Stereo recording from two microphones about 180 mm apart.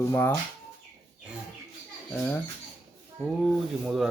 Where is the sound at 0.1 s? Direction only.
15° left (ahead or behind).